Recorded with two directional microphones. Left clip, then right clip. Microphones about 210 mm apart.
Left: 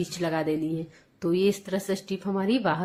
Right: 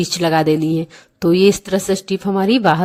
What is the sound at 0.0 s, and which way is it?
Speech, 50° right (ahead or behind).